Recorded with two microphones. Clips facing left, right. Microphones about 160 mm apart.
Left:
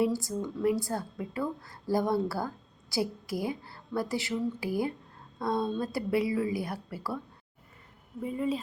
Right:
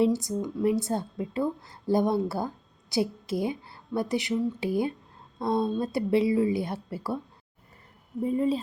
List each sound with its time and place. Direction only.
0.0 s a woman's voice: 20° right (ahead or behind)
8.2 s speech: 35° right (ahead or behind)